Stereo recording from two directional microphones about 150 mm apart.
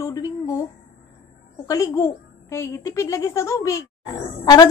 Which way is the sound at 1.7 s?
20° left (ahead or behind).